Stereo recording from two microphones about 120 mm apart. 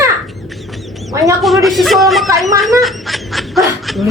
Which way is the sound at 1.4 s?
Centre (ahead or behind).